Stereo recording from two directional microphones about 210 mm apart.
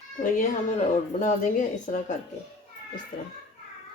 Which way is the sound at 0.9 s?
35° left (ahead or behind).